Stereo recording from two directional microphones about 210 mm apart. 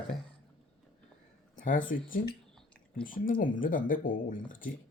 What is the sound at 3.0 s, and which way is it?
Speech, 40° left (ahead or behind).